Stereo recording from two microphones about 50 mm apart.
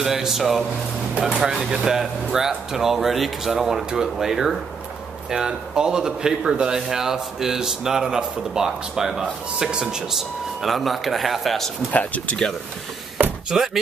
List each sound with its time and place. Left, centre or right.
0.0 s speech: centre
11.9 s speech: left
13.5 s speech: centre